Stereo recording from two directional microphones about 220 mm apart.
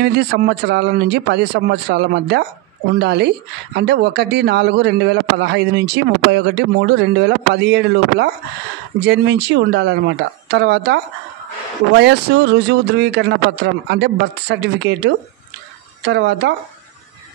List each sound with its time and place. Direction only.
0.0 s a woman's voice: 50° right (ahead or behind)